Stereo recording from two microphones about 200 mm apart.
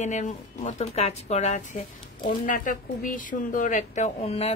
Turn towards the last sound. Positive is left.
turn(degrees=30)  # may be behind; listen again after turning